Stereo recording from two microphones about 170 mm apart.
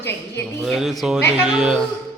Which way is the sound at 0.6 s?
Centre (ahead or behind).